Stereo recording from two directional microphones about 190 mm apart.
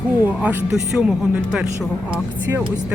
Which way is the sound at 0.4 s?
5° right (ahead or behind).